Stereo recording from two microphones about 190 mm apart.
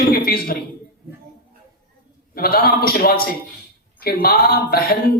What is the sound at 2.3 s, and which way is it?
A woman's voice, 55° left (ahead or behind).